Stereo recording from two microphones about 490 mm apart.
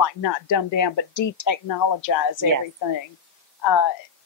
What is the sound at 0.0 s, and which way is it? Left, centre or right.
Speech, left.